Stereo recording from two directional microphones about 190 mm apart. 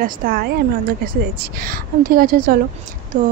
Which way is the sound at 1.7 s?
50° right (ahead or behind).